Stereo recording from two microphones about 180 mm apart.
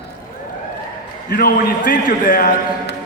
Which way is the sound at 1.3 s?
55° left (ahead or behind).